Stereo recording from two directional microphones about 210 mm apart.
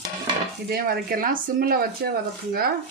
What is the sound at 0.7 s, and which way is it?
Speech, 45° right (ahead or behind).